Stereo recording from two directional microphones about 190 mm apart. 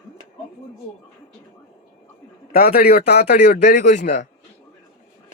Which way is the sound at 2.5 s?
55° left (ahead or behind).